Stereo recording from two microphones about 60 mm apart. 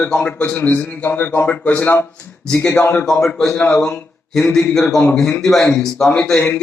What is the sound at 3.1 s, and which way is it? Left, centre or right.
A man's voice, centre.